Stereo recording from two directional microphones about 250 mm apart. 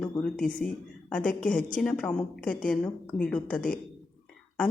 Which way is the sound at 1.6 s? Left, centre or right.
Left.